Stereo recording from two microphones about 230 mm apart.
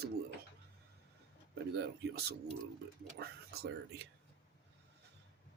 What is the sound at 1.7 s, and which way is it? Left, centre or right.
Speech, right.